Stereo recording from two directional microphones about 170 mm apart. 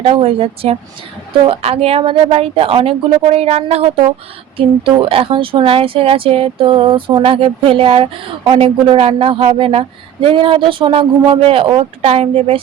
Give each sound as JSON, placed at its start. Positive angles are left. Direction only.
{"t": 0.1, "sound": "speech", "side_deg": -35}